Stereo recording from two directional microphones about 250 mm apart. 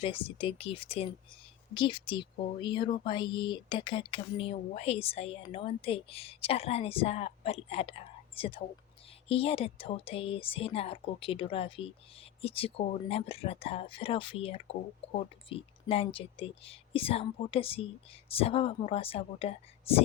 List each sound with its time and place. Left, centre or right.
0.0 s speech: left